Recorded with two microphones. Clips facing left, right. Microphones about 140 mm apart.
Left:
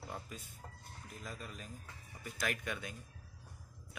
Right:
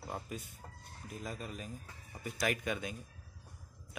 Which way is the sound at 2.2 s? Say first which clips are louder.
Right 5 dB; 15° right (ahead or behind).